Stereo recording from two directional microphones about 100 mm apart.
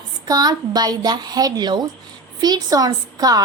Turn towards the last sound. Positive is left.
turn(degrees=-40)  # may be behind; listen again after turning